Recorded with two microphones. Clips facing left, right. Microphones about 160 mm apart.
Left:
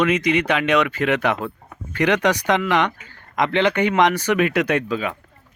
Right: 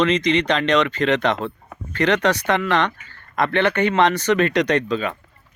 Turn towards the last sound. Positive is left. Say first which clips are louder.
# right 1 dB
turn(degrees=10)  # may be behind; listen again after turning